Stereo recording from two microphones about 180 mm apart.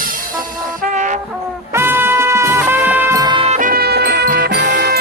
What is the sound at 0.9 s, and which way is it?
Music, 45° right (ahead or behind).